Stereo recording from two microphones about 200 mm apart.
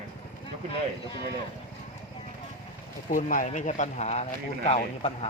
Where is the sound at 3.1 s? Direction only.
40° left (ahead or behind).